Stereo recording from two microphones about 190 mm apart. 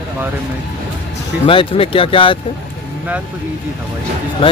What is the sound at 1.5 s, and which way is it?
Speech, 30° left (ahead or behind).